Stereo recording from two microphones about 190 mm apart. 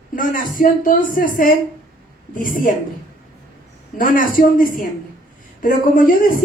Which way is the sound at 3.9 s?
45° left (ahead or behind).